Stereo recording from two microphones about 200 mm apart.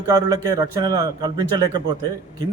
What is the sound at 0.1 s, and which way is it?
A man's voice, 20° right (ahead or behind).